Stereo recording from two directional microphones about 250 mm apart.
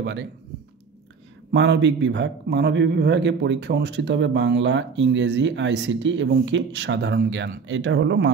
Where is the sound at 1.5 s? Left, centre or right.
Right.